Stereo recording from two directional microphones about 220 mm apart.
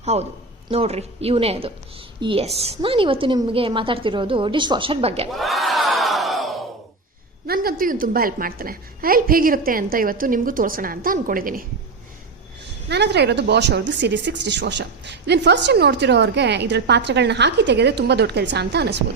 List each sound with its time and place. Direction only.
0.0 s a woman's voice: 30° right (ahead or behind)
5.3 s crowd: centre (ahead or behind)
7.4 s a woman's voice: 45° right (ahead or behind)
12.9 s speech: 50° right (ahead or behind)